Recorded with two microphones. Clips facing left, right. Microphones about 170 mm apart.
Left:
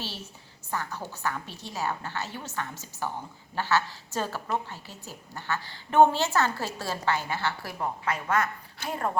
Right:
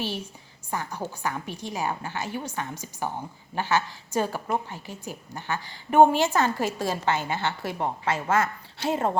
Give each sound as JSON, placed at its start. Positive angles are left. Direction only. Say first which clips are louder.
{"t": 0.7, "sound": "a woman's voice", "louder": "right 2 dB", "side_deg": -15}